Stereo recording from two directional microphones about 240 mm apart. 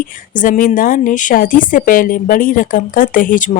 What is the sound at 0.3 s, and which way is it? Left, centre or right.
A woman's voice, left.